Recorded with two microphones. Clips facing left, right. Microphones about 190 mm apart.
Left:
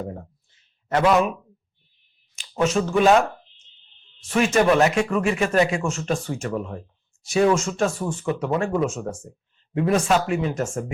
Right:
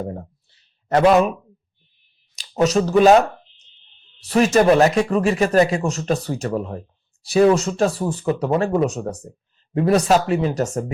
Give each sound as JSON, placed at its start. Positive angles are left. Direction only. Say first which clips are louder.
{"t": 0.0, "sound": "speech", "louder": "right 4 dB", "side_deg": -35}
{"t": 2.3, "sound": "finger snapping", "louder": "right 4 dB", "side_deg": -40}
{"t": 4.2, "sound": "speech", "louder": "right 4 dB", "side_deg": -35}